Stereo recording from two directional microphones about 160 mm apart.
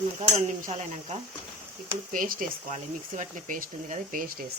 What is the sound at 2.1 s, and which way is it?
Speech, 55° right (ahead or behind).